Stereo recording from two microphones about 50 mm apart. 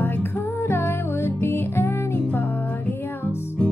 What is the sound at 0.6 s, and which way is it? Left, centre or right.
Music, left.